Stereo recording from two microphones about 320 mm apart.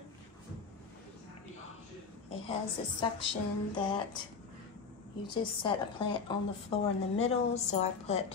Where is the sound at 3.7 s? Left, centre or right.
Centre.